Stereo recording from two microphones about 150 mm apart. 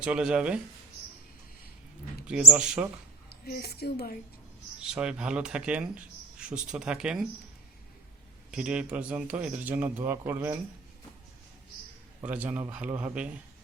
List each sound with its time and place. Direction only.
0.0 s a man's voice: 5° right (ahead or behind)
2.2 s a man's voice: 5° right (ahead or behind)
3.2 s a woman's voice: 90° left
4.8 s a man's voice: 5° right (ahead or behind)
8.4 s a man's voice: 5° right (ahead or behind)
12.2 s a man's voice: 10° right (ahead or behind)